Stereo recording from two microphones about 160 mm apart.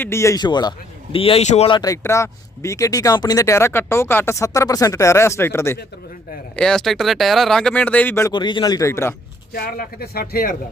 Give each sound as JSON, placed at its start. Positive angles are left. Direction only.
{"t": 0.0, "sound": "speech", "side_deg": 15}
{"t": 1.1, "sound": "speech", "side_deg": 35}
{"t": 1.7, "sound": "speech", "side_deg": 20}
{"t": 6.6, "sound": "speech", "side_deg": 5}
{"t": 8.3, "sound": "speech", "side_deg": 30}
{"t": 9.5, "sound": "speech", "side_deg": 70}